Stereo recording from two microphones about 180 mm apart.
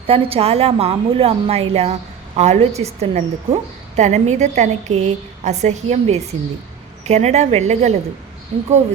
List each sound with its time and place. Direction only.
0.1 s a woman's voice: 30° right (ahead or behind)